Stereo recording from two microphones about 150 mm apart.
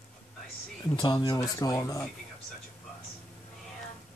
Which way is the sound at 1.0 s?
30° left (ahead or behind).